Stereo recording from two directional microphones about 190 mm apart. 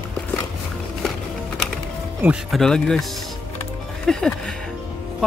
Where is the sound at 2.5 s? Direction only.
5° left (ahead or behind).